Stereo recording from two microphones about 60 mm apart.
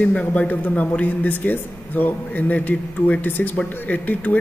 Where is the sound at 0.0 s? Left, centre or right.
Left.